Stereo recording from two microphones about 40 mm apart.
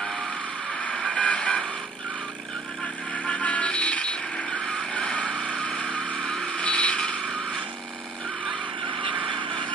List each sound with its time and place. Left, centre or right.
1.1 s vehicle: left
3.3 s vehicle: left